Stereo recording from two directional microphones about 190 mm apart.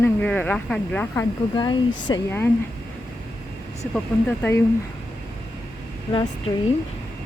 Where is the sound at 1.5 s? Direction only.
25° left (ahead or behind).